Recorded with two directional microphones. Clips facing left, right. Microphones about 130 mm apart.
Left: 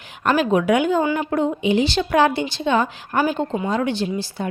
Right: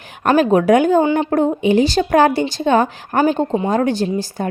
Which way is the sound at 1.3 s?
45° right (ahead or behind).